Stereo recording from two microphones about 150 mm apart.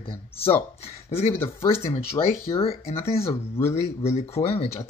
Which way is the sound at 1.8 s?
40° left (ahead or behind).